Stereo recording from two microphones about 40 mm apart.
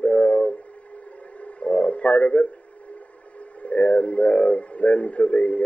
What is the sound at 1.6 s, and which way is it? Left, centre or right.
Radio, left.